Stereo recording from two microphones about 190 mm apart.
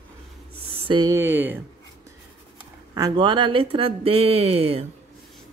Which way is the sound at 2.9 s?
20° right (ahead or behind).